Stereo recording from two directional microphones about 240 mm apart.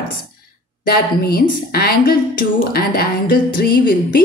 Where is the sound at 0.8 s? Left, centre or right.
Left.